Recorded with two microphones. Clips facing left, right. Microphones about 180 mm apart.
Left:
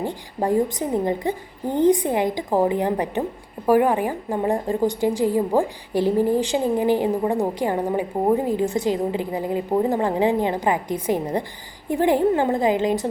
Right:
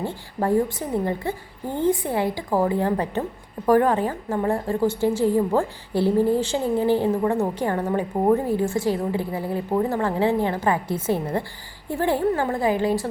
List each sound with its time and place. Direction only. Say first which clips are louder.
0.0 s a woman's voice: left 1 dB; 15° left (ahead or behind)